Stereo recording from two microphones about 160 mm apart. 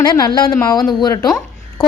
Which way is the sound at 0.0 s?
25° left (ahead or behind).